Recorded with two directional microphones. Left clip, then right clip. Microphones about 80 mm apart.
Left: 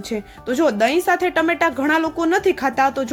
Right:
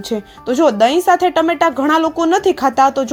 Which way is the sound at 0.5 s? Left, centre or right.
Right.